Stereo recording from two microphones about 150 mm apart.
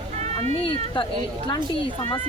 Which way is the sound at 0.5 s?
35° left (ahead or behind).